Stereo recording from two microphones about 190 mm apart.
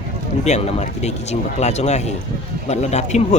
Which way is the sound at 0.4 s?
35° left (ahead or behind).